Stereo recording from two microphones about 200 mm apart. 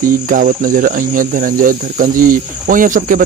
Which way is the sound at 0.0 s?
45° right (ahead or behind).